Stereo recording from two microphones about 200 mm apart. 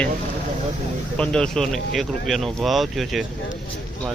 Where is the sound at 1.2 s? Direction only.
5° left (ahead or behind).